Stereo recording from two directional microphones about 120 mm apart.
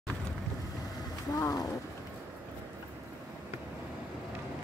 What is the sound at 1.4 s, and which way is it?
Speech, 30° left (ahead or behind).